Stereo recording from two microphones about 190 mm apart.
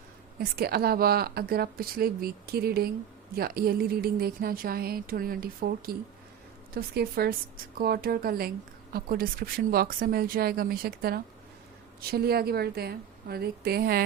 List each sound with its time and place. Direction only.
0.3 s a woman's voice: 55° right (ahead or behind)